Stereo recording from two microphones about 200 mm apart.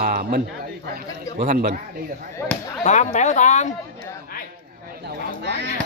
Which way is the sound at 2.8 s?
35° left (ahead or behind).